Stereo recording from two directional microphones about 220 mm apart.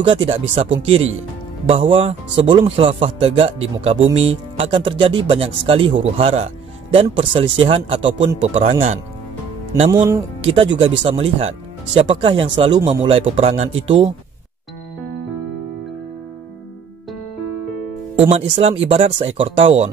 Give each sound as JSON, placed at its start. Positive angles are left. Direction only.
{"t": 0.0, "sound": "speech", "side_deg": -25}
{"t": 9.8, "sound": "speech", "side_deg": -15}
{"t": 18.3, "sound": "speech", "side_deg": -25}